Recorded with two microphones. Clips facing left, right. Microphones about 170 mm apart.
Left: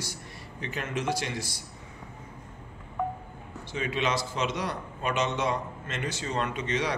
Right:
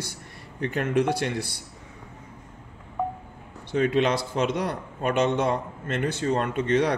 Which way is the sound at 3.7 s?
55° right (ahead or behind).